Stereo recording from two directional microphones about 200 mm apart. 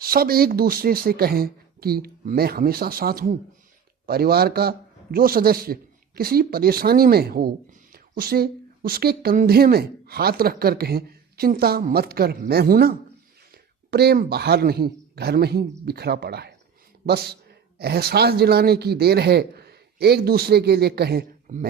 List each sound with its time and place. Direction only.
0.0 s speech: 50° right (ahead or behind)
13.9 s speech: 55° right (ahead or behind)
21.5 s speech: 40° right (ahead or behind)